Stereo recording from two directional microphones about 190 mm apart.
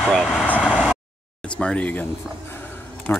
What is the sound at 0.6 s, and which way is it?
Vehicle, 5° right (ahead or behind).